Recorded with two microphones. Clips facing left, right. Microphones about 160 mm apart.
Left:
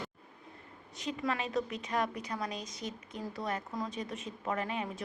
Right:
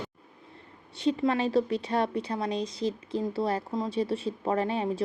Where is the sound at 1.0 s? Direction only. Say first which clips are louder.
Right 9 dB; 30° right (ahead or behind).